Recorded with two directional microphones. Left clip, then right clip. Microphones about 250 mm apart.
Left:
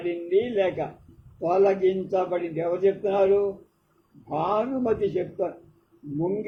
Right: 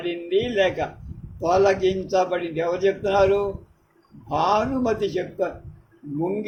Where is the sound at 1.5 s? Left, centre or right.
Right.